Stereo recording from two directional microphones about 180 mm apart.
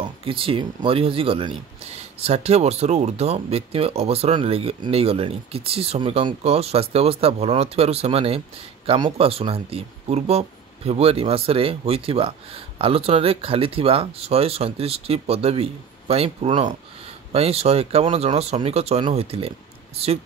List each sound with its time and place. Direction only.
0.0 s speech: 30° right (ahead or behind)